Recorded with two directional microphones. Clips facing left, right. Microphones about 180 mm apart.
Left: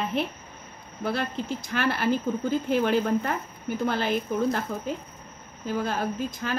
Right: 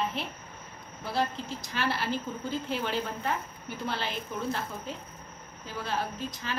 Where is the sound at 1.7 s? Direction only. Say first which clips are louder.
Left 6 dB; 55° left (ahead or behind).